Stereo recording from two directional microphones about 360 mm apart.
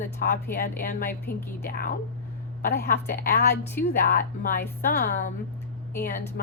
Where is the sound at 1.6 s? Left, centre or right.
Left.